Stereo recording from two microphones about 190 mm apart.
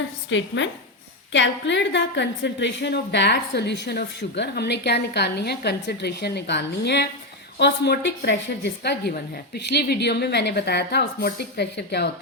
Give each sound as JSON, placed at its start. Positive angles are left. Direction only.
{"t": 0.3, "sound": "a woman's voice", "side_deg": 75}